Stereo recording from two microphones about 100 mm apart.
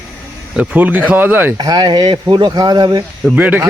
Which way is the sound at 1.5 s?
45° right (ahead or behind).